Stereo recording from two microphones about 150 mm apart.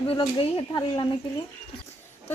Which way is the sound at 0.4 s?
30° left (ahead or behind).